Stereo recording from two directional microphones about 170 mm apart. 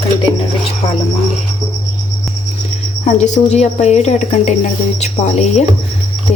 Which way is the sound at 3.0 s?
45° left (ahead or behind).